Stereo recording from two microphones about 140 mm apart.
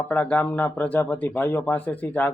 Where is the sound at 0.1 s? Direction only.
15° left (ahead or behind).